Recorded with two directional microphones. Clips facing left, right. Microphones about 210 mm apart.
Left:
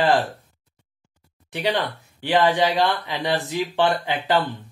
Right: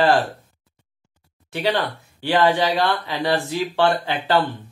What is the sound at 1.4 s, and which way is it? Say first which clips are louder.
Speech: right 2 dB; 20° left (ahead or behind).